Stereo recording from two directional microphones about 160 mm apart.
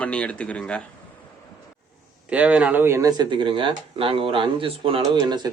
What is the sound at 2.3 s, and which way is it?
Speech, 10° right (ahead or behind).